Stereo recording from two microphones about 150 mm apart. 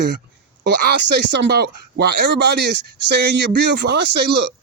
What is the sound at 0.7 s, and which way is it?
Speech, 90° right.